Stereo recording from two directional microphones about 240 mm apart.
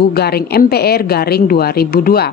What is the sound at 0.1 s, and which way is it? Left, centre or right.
Speech, left.